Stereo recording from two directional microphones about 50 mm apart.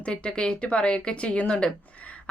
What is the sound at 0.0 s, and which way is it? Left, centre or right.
A woman's voice, left.